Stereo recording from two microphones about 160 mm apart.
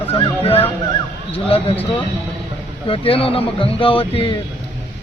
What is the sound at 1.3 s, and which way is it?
Speech, 35° left (ahead or behind).